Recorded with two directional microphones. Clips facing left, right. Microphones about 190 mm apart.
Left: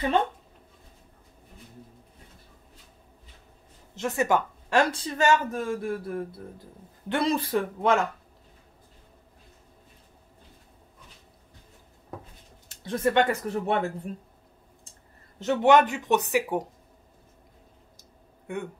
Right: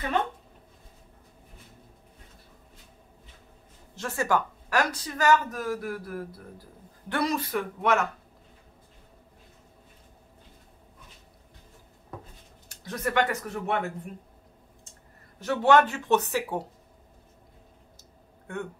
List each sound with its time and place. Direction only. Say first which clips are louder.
3.9 s speech: left 2 dB; 20° left (ahead or behind)
12.6 s speech: left 6 dB; 30° left (ahead or behind)
15.3 s speech: left 1 dB; 20° left (ahead or behind)
18.5 s speech: left 2 dB; 15° left (ahead or behind)